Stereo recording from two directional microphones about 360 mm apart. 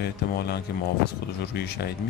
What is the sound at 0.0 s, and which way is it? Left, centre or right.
Speech, left.